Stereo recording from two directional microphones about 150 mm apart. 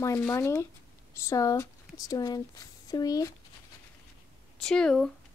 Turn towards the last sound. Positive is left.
turn(degrees=5)  # may be behind; listen again after turning